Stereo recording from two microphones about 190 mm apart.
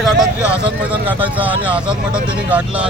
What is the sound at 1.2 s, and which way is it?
Speech, 10° right (ahead or behind).